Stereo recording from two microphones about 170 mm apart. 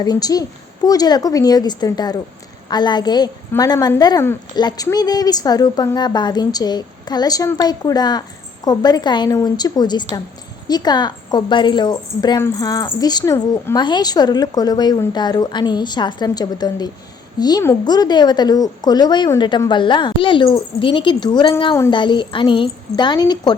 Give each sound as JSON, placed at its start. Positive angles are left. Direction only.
{"t": 0.0, "sound": "a woman's voice", "side_deg": 20}